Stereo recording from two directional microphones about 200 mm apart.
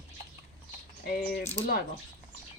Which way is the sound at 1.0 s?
45° left (ahead or behind).